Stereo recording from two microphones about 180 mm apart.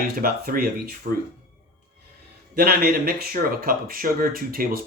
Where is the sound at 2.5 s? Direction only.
55° right (ahead or behind).